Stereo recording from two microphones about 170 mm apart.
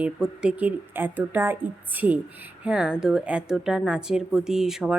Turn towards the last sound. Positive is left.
turn(degrees=-5)  # may be behind; listen again after turning